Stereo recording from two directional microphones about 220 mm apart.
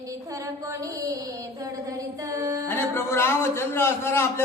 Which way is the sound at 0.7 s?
15° right (ahead or behind).